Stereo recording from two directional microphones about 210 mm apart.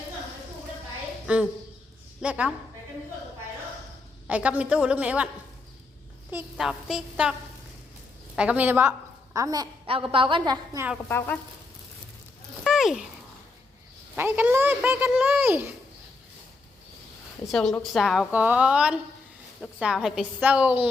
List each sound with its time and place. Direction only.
1.3 s a child's voice: 5° right (ahead or behind)
4.3 s a child's voice: 5° right (ahead or behind)
6.3 s a woman's voice: centre (ahead or behind)
8.4 s a woman's voice: 5° right (ahead or behind)
12.6 s speech: centre (ahead or behind)
14.2 s a child's voice: 10° right (ahead or behind)
17.5 s a woman's voice: centre (ahead or behind)